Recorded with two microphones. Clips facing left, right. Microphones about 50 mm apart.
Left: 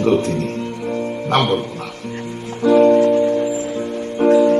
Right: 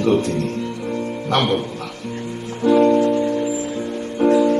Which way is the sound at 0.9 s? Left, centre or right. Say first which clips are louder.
Left 3 dB; left.